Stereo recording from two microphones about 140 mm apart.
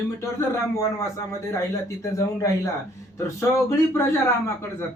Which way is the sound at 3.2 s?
20° left (ahead or behind).